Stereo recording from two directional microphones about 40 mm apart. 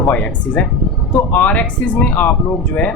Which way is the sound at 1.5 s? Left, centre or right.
Left.